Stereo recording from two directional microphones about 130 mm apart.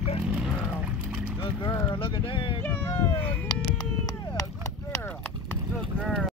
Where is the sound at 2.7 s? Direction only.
15° left (ahead or behind).